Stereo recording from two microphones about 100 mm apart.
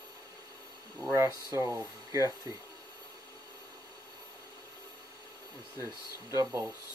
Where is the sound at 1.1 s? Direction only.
30° right (ahead or behind).